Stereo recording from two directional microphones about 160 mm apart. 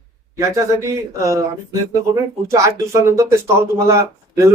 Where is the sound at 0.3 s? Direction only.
20° right (ahead or behind).